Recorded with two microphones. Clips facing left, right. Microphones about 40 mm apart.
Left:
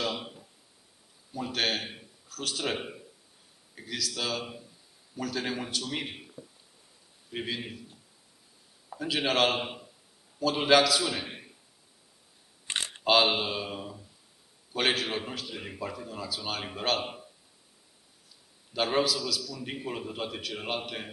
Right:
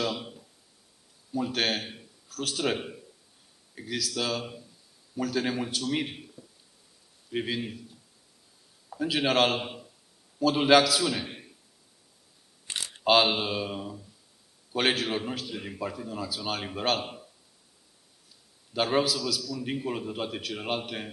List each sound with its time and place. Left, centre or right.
0.0 s a sound: centre
1.3 s a man's voice: centre
7.2 s speech: centre
8.9 s a man's voice: centre
9.6 s a man's voice: centre
10.4 s a man's voice: centre
12.6 s a sound: left
13.0 s a man's voice: centre
17.0 s speech: centre
18.7 s a man's voice: centre